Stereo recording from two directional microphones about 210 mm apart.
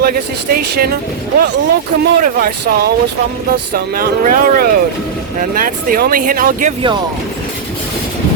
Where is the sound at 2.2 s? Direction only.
50° right (ahead or behind).